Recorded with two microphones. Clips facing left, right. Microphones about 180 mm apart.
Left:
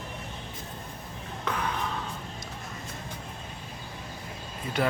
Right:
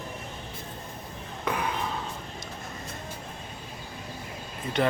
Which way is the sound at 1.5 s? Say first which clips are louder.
Right 2 dB; 10° right (ahead or behind).